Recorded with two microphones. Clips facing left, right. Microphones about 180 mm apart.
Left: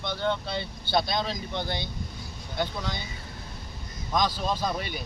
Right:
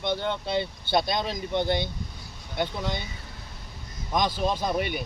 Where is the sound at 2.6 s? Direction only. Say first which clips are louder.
Right 2 dB; 20° right (ahead or behind).